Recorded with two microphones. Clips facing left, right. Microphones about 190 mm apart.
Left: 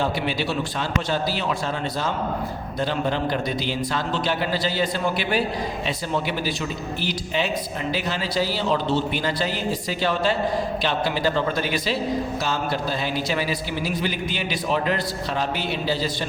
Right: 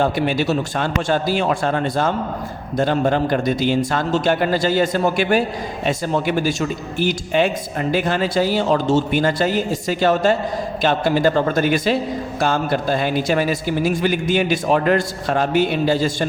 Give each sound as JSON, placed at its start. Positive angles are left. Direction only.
{"t": 0.0, "sound": "speech", "side_deg": -45}